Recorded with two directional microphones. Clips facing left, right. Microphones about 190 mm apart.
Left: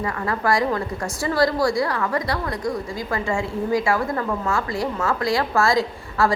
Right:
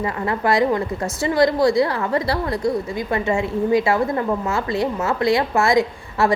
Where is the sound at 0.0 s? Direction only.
20° right (ahead or behind).